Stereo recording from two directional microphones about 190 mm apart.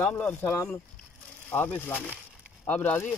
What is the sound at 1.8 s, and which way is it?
Speech, 5° left (ahead or behind).